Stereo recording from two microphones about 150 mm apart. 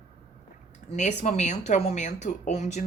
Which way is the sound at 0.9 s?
50° left (ahead or behind).